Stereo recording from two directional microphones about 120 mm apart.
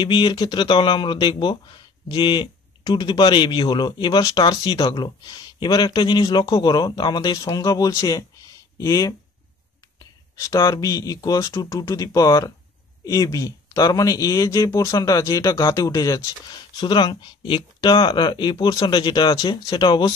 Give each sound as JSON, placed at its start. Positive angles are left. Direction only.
{"t": 0.0, "sound": "speech", "side_deg": 40}
{"t": 10.3, "sound": "speech", "side_deg": 25}